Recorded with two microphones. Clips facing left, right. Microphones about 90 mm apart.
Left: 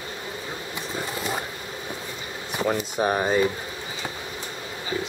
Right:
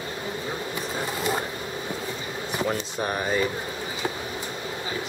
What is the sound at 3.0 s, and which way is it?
Speech, 25° left (ahead or behind).